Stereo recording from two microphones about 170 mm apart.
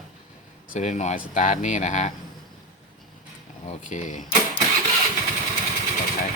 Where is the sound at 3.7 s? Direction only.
45° left (ahead or behind).